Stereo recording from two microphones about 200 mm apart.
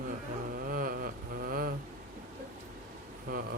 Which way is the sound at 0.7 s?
45° right (ahead or behind).